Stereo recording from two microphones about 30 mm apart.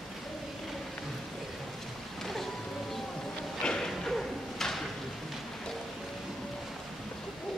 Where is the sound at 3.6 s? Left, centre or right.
Centre.